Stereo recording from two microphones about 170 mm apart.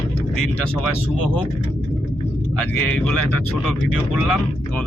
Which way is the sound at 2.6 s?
5° left (ahead or behind).